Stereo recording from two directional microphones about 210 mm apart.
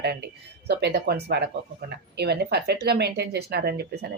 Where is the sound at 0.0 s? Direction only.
50° right (ahead or behind).